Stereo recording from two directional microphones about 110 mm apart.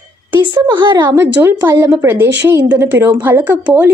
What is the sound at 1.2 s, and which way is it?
A woman's voice, 25° right (ahead or behind).